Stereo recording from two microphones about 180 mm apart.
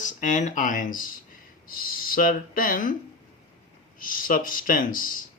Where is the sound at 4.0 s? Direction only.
50° left (ahead or behind).